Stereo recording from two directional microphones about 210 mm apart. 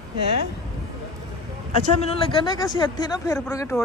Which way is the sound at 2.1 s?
20° left (ahead or behind).